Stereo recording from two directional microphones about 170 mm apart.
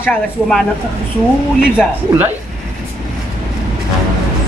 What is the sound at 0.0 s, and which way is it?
Speech, 5° left (ahead or behind).